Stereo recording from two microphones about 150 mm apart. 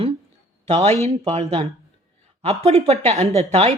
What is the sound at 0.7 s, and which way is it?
A woman's voice, 45° right (ahead or behind).